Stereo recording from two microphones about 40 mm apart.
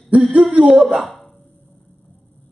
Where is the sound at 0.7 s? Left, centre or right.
Centre.